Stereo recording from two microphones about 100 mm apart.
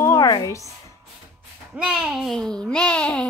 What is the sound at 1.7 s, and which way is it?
A child's voice, 5° right (ahead or behind).